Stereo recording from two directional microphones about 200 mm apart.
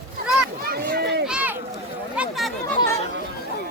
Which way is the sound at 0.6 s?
50° right (ahead or behind).